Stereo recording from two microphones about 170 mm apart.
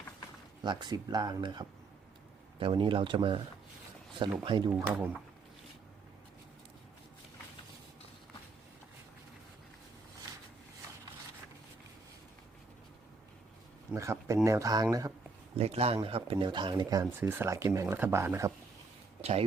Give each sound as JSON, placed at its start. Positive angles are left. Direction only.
{"t": 0.6, "sound": "speech", "side_deg": -25}
{"t": 4.4, "sound": "speech", "side_deg": -30}
{"t": 4.7, "sound": "speech", "side_deg": -10}
{"t": 13.9, "sound": "speech", "side_deg": -15}
{"t": 15.5, "sound": "speech", "side_deg": -35}
{"t": 19.2, "sound": "speech", "side_deg": -40}